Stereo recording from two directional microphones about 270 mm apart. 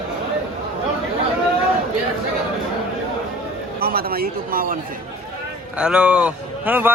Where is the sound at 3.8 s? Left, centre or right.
Right.